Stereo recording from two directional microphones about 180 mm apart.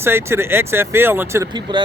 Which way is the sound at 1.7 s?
25° right (ahead or behind).